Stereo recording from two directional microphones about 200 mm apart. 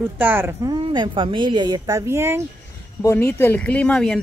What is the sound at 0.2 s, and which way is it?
A woman's voice, 10° right (ahead or behind).